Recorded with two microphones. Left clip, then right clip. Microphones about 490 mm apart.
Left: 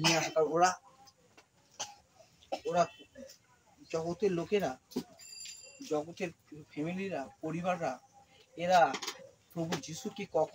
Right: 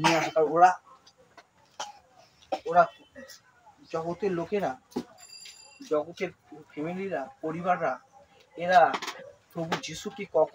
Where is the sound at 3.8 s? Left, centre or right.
Left.